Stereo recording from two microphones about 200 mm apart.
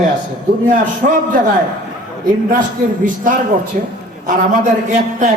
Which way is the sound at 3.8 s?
45° right (ahead or behind).